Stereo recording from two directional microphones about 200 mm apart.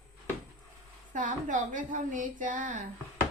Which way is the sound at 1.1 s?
40° right (ahead or behind).